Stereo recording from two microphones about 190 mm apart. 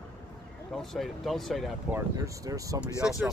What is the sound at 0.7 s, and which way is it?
Speech, centre (ahead or behind).